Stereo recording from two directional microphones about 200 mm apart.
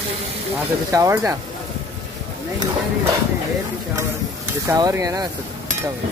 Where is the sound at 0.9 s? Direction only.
15° right (ahead or behind).